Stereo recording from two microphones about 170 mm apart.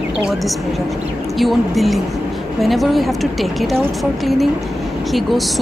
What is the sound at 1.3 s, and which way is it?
A woman's voice, centre (ahead or behind).